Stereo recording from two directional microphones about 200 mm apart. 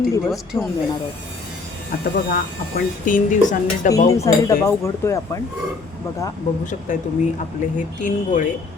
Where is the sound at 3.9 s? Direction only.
15° left (ahead or behind).